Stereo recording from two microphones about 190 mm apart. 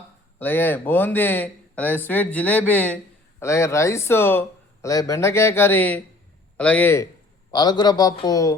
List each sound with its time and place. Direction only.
0.3 s a man's voice: 10° left (ahead or behind)